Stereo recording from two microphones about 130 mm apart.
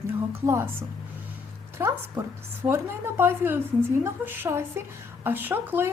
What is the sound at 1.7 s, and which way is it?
A woman's voice, 20° right (ahead or behind).